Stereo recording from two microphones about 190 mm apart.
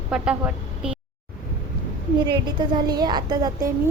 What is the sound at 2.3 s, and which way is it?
A woman's voice, 25° right (ahead or behind).